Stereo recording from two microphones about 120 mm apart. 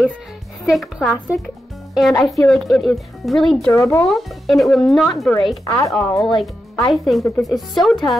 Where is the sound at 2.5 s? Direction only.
Centre (ahead or behind).